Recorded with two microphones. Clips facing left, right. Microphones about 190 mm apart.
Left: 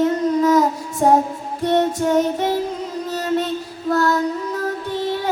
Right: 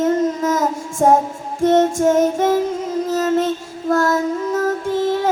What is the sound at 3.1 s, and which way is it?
Child singing, 45° right (ahead or behind).